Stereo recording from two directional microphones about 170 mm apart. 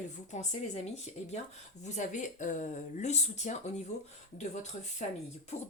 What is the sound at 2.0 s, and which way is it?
A woman's voice, 45° left (ahead or behind).